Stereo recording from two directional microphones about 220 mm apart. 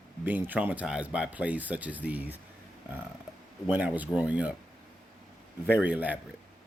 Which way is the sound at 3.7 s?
5° right (ahead or behind).